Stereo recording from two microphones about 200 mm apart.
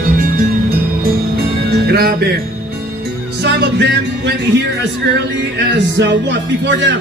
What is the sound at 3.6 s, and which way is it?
Speech, 55° right (ahead or behind).